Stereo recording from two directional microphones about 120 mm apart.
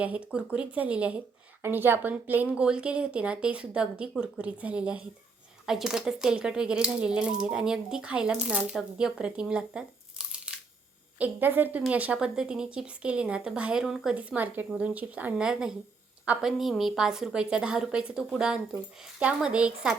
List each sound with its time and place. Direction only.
0.3 s a woman's voice: 10° right (ahead or behind)